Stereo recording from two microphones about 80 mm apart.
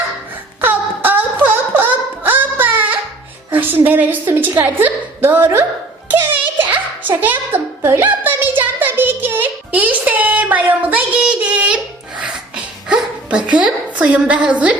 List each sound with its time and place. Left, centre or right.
0.6 s a sound: right
3.5 s a woman's voice: right
6.6 s music: right
13.5 s a woman's voice: centre